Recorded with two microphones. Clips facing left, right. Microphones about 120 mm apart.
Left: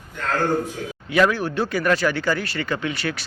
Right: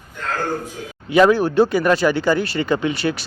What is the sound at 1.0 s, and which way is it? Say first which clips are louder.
Speech: right 6 dB; 25° right (ahead or behind).